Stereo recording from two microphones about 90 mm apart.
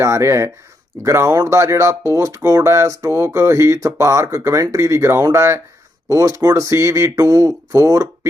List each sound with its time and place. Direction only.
0.0 s speech: 30° right (ahead or behind)